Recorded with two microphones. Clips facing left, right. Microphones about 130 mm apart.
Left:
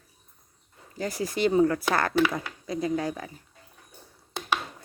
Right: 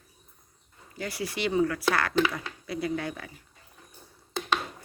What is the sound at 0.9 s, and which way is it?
Speech, 40° left (ahead or behind).